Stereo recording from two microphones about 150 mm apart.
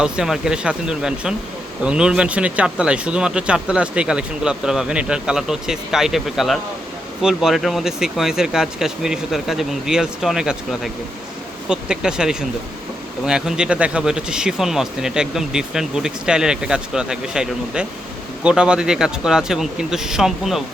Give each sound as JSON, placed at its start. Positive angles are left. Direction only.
{"t": 0.0, "sound": "speech", "side_deg": -5}